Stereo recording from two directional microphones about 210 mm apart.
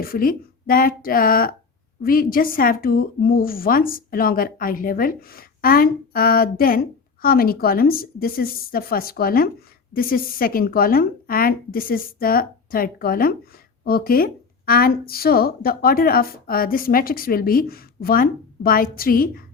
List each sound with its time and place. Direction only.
0.0 s a woman's voice: 45° left (ahead or behind)